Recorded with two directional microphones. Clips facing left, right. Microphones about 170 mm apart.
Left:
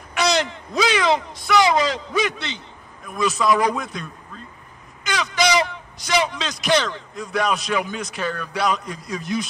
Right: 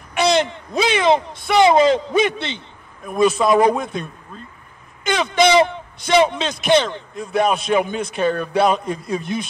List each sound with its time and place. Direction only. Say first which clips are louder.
0.1 s a man's voice: right 4 dB; 25° right (ahead or behind)